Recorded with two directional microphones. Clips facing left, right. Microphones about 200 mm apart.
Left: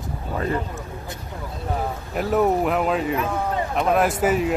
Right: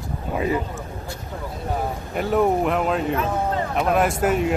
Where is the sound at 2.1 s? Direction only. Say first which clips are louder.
Even; centre (ahead or behind).